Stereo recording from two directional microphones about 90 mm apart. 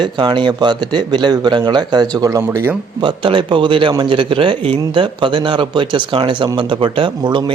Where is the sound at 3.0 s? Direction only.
65° right (ahead or behind).